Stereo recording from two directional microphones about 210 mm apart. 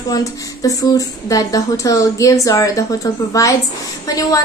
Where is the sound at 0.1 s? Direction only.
15° left (ahead or behind).